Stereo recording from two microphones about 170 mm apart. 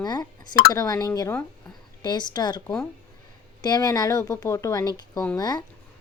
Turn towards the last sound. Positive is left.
turn(degrees=25)  # may be behind; listen again after turning